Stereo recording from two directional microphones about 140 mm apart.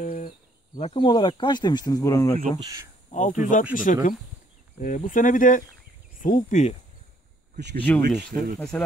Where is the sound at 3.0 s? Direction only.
60° left (ahead or behind).